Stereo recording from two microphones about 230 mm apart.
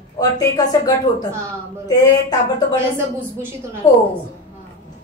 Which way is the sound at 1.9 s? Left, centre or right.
Centre.